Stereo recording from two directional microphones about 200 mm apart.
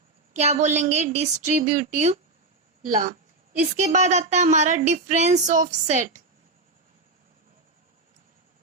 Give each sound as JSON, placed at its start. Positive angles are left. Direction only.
{"t": 0.3, "sound": "speech", "side_deg": -35}